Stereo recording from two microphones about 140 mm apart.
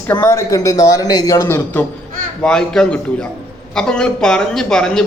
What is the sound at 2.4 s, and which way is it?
A man's voice, 5° left (ahead or behind).